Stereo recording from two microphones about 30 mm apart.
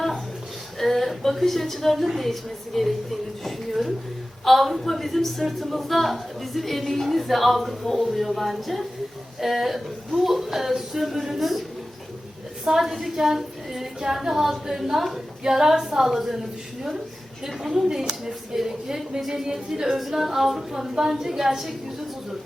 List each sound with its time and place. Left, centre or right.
0.8 s a sound: centre
2.1 s a woman's voice: centre
12.7 s a woman's voice: centre
15.5 s speech: centre